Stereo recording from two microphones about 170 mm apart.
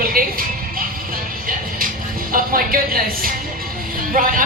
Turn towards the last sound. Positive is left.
turn(degrees=-55)  # may be behind; listen again after turning